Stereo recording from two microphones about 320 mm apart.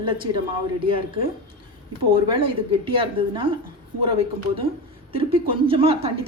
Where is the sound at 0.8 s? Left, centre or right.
Centre.